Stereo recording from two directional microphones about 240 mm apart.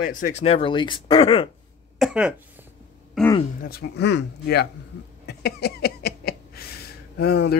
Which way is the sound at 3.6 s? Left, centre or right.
Left.